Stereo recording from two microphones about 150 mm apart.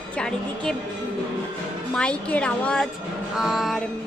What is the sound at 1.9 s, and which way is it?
Speech, 5° left (ahead or behind).